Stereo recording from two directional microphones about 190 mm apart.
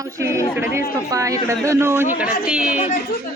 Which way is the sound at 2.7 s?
40° left (ahead or behind).